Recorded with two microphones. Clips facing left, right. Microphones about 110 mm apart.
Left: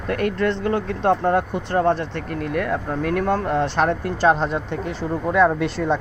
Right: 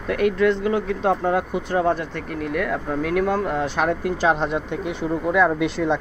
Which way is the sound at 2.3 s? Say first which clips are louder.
Left 1 dB; 55° left (ahead or behind).